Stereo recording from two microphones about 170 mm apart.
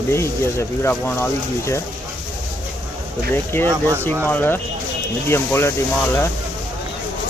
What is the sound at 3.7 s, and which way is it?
Speech, 15° right (ahead or behind).